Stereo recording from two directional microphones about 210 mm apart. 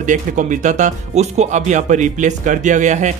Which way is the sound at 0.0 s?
35° right (ahead or behind).